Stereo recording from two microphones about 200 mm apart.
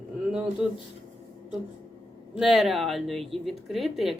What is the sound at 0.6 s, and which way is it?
Speech, 5° right (ahead or behind).